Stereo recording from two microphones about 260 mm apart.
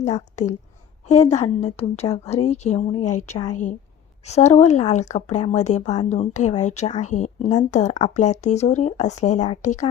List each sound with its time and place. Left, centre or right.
0.0 s speech: left